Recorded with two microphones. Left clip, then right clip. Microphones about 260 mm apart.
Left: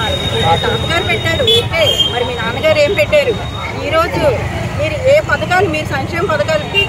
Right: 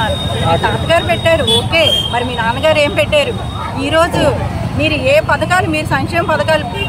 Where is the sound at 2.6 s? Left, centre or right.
Centre.